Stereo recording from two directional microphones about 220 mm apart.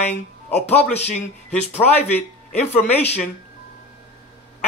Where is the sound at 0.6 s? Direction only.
30° left (ahead or behind).